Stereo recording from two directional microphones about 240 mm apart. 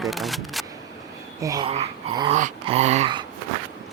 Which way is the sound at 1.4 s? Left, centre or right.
Centre.